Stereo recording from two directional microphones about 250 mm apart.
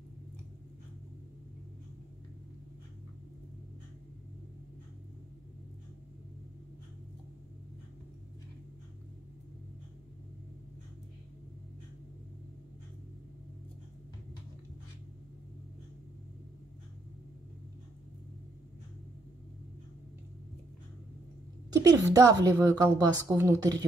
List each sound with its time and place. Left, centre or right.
21.7 s a woman's voice: centre